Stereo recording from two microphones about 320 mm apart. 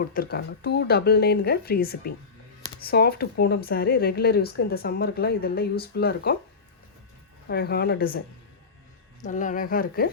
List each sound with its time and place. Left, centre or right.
0.1 s speech: left
7.4 s speech: left
9.2 s speech: left